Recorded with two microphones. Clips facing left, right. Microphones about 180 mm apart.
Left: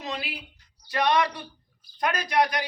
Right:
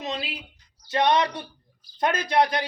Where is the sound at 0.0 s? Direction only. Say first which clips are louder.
Right 2 dB; 20° right (ahead or behind).